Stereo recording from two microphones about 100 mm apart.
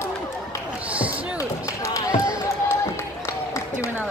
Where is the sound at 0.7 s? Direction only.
15° right (ahead or behind).